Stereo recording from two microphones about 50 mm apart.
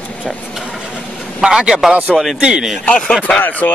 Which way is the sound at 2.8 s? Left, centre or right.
Left.